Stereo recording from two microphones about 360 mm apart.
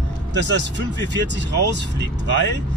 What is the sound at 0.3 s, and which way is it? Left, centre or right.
Speech, right.